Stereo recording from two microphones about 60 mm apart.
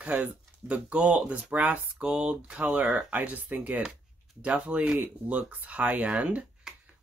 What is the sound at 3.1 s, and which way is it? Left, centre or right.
Speech, right.